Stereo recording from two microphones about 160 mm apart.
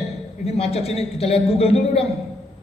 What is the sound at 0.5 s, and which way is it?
A man's voice, 40° left (ahead or behind).